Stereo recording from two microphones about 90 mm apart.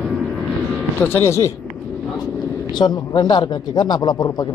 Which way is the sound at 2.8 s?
55° left (ahead or behind).